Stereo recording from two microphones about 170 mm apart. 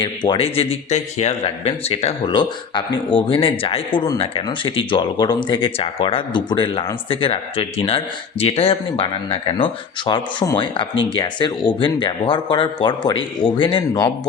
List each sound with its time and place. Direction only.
0.0 s speech: 30° left (ahead or behind)